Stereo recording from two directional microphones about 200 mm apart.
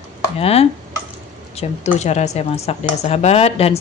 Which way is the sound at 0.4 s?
30° left (ahead or behind).